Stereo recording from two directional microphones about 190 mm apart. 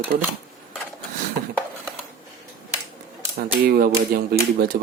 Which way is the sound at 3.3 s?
55° right (ahead or behind).